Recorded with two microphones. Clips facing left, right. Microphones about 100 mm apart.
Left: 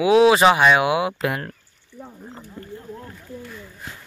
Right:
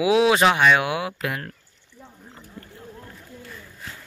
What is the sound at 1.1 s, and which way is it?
Speech, 30° left (ahead or behind).